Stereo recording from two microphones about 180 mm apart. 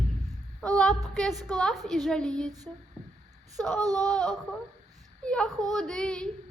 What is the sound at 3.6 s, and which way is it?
Speech, 5° left (ahead or behind).